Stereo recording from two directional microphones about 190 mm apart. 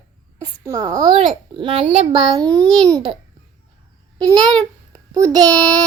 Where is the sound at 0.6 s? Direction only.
15° right (ahead or behind).